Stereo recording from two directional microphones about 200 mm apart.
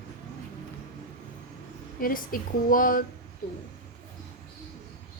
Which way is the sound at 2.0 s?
45° left (ahead or behind).